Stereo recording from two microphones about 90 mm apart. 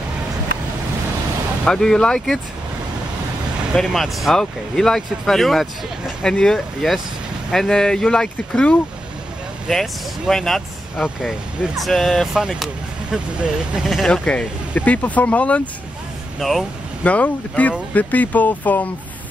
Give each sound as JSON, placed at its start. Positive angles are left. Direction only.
{"t": 1.6, "sound": "speech", "side_deg": 5}
{"t": 3.7, "sound": "speech", "side_deg": 0}
{"t": 13.8, "sound": "speech", "side_deg": 5}
{"t": 16.3, "sound": "speech", "side_deg": 5}
{"t": 17.0, "sound": "speech", "side_deg": 15}